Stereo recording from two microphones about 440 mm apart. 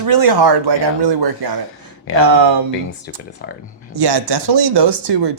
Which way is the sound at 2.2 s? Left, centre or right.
Right.